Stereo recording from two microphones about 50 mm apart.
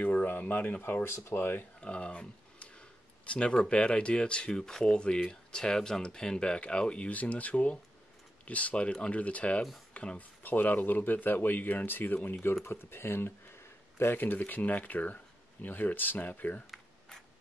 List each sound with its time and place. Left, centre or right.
0.0 s speech: left
1.0 s speech: left
1.8 s speech: left
12.6 s speech: left